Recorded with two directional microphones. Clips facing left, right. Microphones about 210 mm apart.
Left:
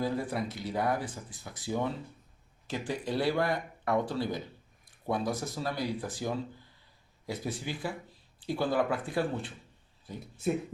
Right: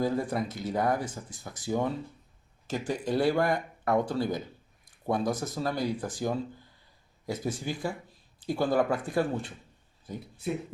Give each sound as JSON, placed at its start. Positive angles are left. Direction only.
{"t": 0.0, "sound": "speech", "side_deg": -45}